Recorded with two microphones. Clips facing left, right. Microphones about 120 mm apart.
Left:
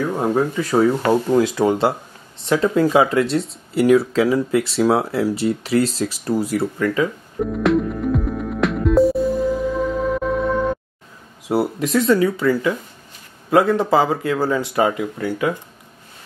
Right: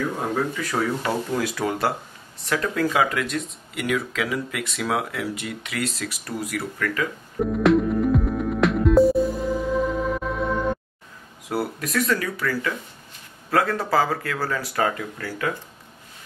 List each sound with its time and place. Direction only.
0.2 s speech: 25° left (ahead or behind)
7.5 s music: centre (ahead or behind)
11.4 s speech: 25° left (ahead or behind)